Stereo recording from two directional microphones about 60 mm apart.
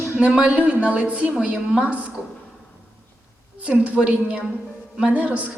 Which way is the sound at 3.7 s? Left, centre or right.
Centre.